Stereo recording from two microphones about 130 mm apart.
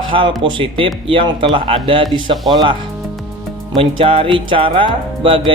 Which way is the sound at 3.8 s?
45° right (ahead or behind).